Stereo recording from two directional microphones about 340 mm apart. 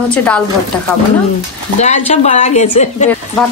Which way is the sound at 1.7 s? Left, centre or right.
Centre.